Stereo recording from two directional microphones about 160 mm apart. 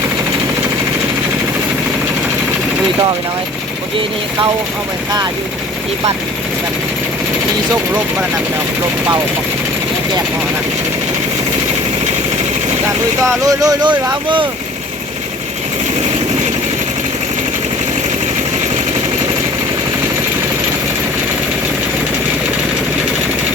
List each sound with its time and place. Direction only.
13.2 s speech: 20° right (ahead or behind)